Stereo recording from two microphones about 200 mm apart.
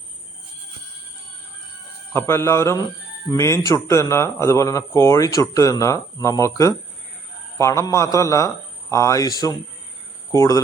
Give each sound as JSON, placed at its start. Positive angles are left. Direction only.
{"t": 2.1, "sound": "speech", "side_deg": 10}